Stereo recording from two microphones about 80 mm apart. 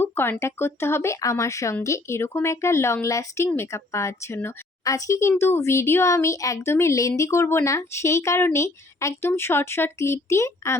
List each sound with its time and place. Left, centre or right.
0.0 s a child's voice: left